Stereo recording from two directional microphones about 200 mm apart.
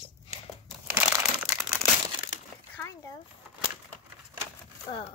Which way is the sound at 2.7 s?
15° left (ahead or behind).